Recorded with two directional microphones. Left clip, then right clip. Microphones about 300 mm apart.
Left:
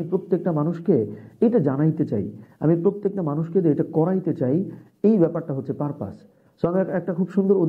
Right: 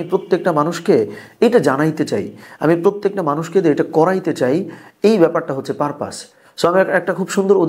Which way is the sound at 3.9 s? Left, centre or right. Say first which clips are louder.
Right 8 dB; centre.